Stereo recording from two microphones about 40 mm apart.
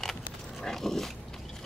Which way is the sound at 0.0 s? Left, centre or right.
Centre.